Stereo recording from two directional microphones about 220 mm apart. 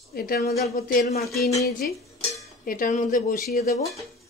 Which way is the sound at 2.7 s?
40° left (ahead or behind).